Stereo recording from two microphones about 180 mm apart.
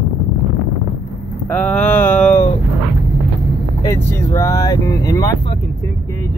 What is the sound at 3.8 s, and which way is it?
Vehicle, 15° left (ahead or behind).